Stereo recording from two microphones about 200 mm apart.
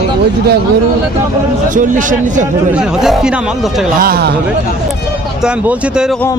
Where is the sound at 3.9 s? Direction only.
50° right (ahead or behind).